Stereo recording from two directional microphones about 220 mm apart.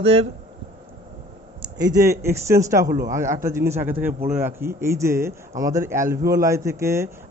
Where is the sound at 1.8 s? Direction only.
15° right (ahead or behind).